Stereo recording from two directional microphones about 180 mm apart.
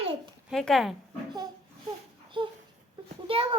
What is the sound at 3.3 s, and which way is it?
Speech, 30° right (ahead or behind).